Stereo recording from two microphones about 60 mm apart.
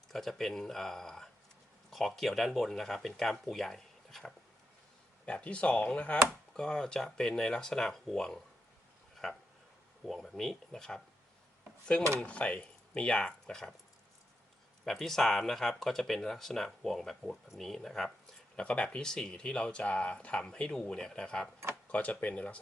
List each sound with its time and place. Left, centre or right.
0.1 s speech: centre
5.2 s speech: centre
12.2 s speech: left
14.8 s speech: centre
18.5 s speech: centre